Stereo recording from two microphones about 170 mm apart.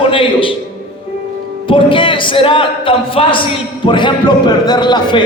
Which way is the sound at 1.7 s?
30° left (ahead or behind).